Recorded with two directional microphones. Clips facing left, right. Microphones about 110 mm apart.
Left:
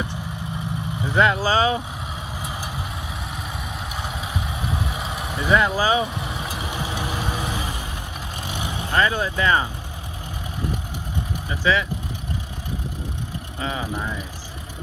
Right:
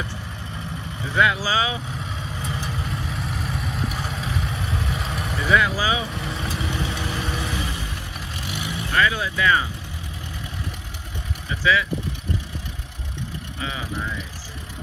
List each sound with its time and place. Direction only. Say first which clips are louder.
1.0 s speech: left 2 dB; 30° left (ahead or behind)
2.6 s vehicle: right 2 dB; 5° left (ahead or behind)
5.5 s speech: left 2 dB; 30° left (ahead or behind)
6.2 s vehicle: right 1 dB; 25° left (ahead or behind)
13.6 s vehicle: left 4 dB; 35° left (ahead or behind)